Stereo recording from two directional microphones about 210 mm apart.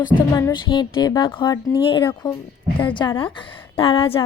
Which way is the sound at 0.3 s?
20° left (ahead or behind).